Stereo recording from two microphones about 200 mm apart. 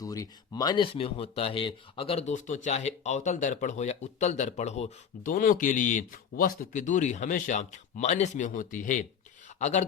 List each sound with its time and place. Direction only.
0.0 s speech: 15° left (ahead or behind); by 9.8 s 35° left (ahead or behind)